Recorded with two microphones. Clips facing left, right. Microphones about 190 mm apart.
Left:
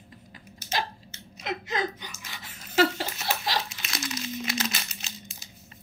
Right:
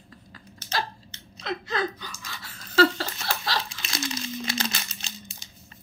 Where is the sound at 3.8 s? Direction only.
30° right (ahead or behind).